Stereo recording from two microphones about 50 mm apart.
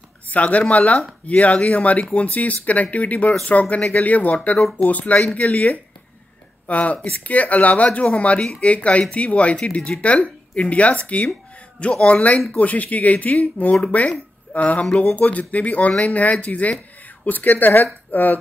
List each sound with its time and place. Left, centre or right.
0.3 s speech: left